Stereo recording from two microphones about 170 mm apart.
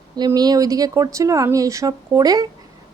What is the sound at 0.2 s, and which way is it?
Speech, 25° right (ahead or behind).